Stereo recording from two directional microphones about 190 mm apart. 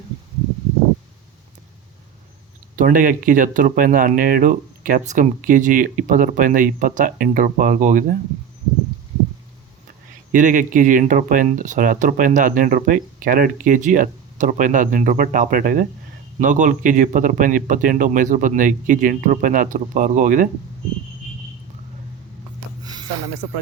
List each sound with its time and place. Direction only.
2.7 s speech: 45° right (ahead or behind)
10.3 s speech: 45° right (ahead or behind)
22.8 s a sound: 20° right (ahead or behind)